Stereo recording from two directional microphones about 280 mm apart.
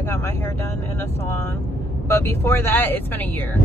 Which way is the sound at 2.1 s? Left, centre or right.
Centre.